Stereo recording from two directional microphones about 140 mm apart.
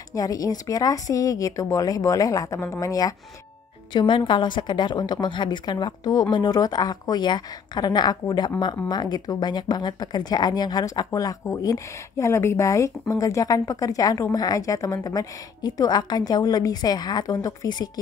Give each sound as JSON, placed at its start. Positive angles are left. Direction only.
{"t": 0.1, "sound": "a woman's voice", "side_deg": 25}